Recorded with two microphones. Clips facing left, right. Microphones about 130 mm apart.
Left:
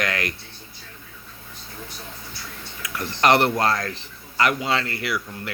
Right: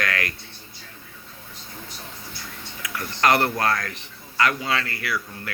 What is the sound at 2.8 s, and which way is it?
Speech, 20° left (ahead or behind).